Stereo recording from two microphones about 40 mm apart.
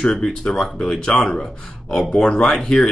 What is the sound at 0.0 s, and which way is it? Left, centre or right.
Speech, centre.